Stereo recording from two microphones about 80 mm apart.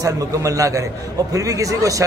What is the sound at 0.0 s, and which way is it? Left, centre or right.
Speech, right.